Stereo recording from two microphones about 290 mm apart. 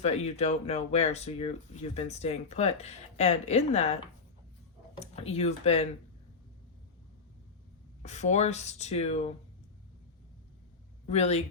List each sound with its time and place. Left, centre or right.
0.0 s speech: left
4.9 s speech: left
8.0 s speech: left
11.0 s speech: left